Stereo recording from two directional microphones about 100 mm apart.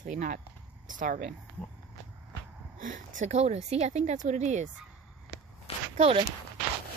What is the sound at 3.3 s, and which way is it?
Speech, 90° right.